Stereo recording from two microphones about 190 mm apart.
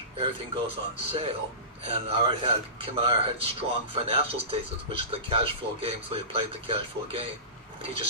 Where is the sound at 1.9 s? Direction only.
30° right (ahead or behind).